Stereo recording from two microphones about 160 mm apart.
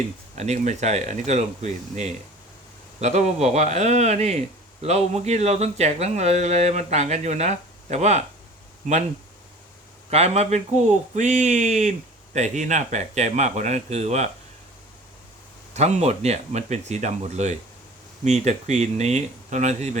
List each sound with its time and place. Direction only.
0.3 s a man's voice: 45° right (ahead or behind)
10.1 s a man's voice: 40° right (ahead or behind)
15.7 s a man's voice: 45° right (ahead or behind)